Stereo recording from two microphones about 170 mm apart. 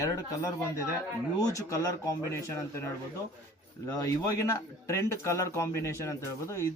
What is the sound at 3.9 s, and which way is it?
A man's voice, 20° left (ahead or behind).